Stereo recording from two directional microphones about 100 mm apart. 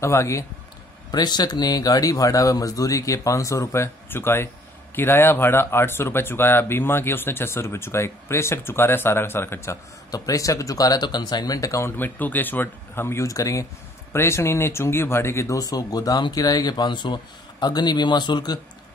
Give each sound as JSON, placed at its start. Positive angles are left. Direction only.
{"t": 0.0, "sound": "speech", "side_deg": 30}
{"t": 1.1, "sound": "speech", "side_deg": 45}
{"t": 10.1, "sound": "speech", "side_deg": 35}
{"t": 12.0, "sound": "speech", "side_deg": 15}